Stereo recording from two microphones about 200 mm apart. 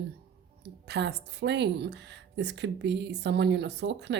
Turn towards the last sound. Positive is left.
turn(degrees=-60)  # may be behind; listen again after turning